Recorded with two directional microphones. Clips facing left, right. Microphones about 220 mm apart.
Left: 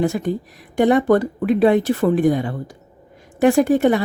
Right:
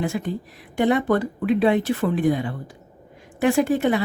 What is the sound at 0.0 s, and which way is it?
A woman's voice, 45° left (ahead or behind).